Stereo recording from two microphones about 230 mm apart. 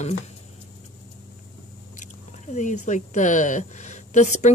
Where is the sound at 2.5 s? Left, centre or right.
Left.